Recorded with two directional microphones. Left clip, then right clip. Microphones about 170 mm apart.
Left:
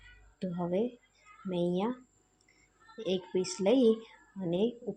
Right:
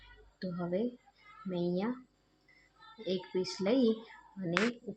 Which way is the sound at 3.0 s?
15° left (ahead or behind).